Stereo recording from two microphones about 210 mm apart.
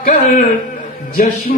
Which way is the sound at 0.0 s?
40° left (ahead or behind).